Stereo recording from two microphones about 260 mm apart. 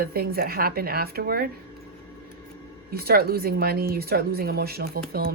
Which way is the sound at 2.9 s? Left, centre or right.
Right.